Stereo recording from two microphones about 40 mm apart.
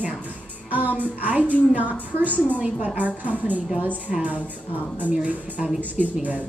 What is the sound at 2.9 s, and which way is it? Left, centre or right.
Speech, right.